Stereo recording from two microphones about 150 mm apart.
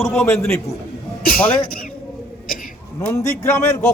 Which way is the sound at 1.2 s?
70° left (ahead or behind).